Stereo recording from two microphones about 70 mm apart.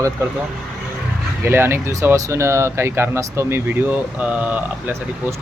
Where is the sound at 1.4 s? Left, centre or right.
Right.